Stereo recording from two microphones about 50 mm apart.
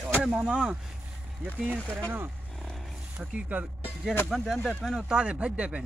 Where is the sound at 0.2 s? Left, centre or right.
Right.